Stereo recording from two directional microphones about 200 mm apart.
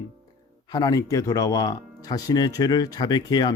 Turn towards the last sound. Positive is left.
turn(degrees=20)  # may be behind; listen again after turning